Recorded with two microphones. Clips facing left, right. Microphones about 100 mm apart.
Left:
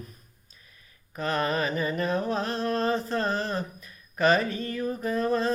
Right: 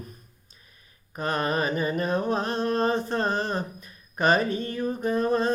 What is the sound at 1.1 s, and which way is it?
Music, 20° right (ahead or behind).